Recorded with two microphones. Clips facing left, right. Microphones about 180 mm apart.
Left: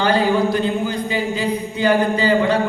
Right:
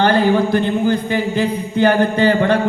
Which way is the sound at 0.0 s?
55° right (ahead or behind).